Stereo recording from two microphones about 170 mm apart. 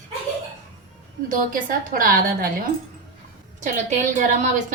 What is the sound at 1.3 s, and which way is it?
A woman's voice, 55° right (ahead or behind).